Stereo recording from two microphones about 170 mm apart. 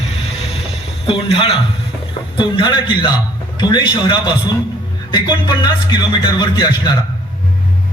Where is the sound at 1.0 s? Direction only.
35° left (ahead or behind).